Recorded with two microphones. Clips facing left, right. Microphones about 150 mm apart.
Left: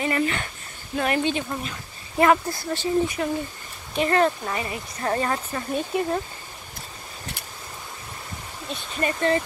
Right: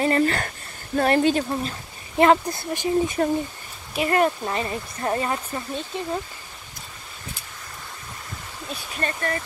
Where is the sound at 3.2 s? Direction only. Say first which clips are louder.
Right 4 dB; 40° right (ahead or behind).